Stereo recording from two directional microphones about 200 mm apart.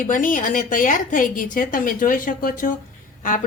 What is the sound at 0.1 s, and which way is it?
A woman's voice, 40° left (ahead or behind).